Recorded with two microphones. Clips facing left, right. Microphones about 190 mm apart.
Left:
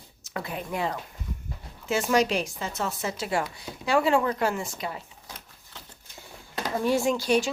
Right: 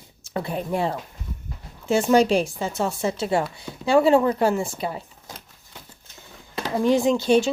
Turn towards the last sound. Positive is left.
turn(degrees=-25)  # may be behind; listen again after turning